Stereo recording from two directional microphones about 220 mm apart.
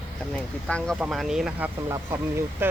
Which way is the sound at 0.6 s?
Centre (ahead or behind).